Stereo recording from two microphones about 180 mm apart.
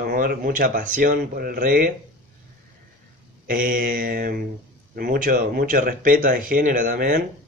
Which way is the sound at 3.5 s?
50° right (ahead or behind).